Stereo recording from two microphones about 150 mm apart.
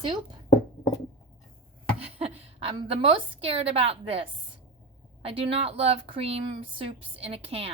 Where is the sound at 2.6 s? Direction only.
35° right (ahead or behind).